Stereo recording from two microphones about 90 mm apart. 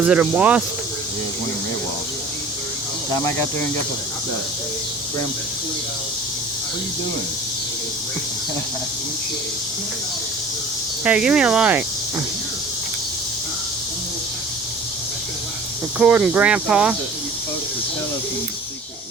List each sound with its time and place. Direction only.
0.0 s speech: 15° right (ahead or behind)
3.1 s speech: 35° left (ahead or behind)
11.0 s speech: 10° right (ahead or behind)
16.0 s speech: 10° right (ahead or behind)